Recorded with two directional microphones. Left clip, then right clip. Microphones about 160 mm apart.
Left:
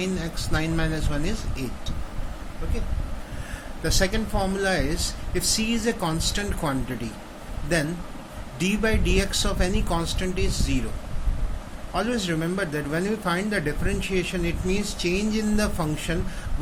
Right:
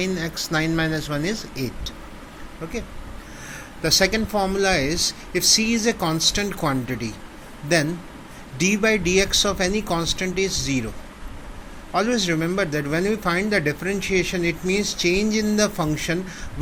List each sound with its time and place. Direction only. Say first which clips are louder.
0.0 s speech: right 4 dB; 30° right (ahead or behind)
3.8 s speech: right 6 dB; 35° right (ahead or behind)
11.9 s speech: right 5 dB; 25° right (ahead or behind)